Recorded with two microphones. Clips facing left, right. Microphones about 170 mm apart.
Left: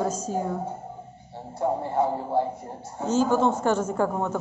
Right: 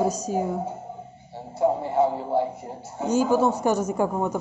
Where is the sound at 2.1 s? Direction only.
5° right (ahead or behind).